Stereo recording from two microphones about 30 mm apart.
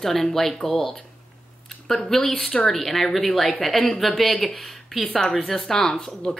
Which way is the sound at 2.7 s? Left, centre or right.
Centre.